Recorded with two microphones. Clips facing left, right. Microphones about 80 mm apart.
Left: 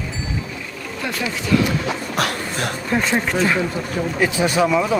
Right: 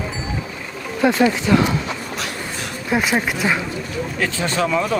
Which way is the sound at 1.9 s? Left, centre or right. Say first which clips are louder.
Left 5 dB; left.